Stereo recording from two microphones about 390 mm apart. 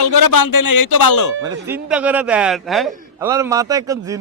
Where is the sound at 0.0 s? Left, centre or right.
Left.